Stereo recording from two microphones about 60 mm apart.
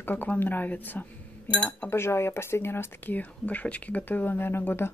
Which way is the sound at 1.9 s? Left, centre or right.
Left.